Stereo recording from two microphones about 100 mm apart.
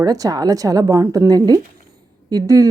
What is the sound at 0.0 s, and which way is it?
A woman's voice, 35° right (ahead or behind).